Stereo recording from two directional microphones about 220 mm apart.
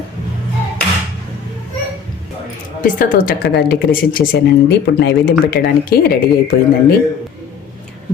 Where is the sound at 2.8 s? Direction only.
35° left (ahead or behind).